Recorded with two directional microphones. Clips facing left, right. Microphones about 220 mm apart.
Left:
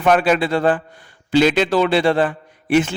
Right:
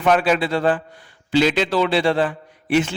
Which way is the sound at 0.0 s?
50° left (ahead or behind).